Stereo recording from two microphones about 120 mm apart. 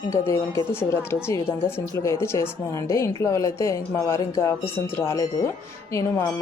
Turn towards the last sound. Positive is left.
turn(degrees=25)  # may be behind; listen again after turning